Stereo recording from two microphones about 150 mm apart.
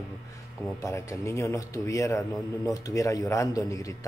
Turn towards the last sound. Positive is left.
turn(degrees=20)  # may be behind; listen again after turning